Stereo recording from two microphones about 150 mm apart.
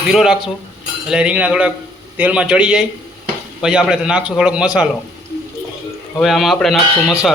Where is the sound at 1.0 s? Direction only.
5° right (ahead or behind).